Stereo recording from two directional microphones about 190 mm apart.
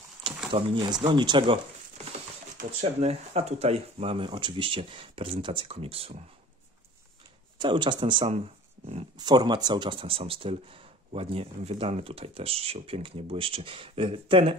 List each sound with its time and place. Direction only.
0.5 s speech: 30° right (ahead or behind)
2.5 s speech: 35° right (ahead or behind)
7.5 s speech: 25° right (ahead or behind)